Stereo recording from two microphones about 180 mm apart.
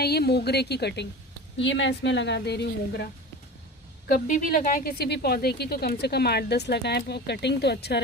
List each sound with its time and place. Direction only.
0.0 s a woman's voice: 60° left (ahead or behind)
1.5 s a woman's voice: 90° left; by 3.1 s 65° left (ahead or behind)
4.1 s a woman's voice: 50° left (ahead or behind); by 8.0 s 65° left (ahead or behind)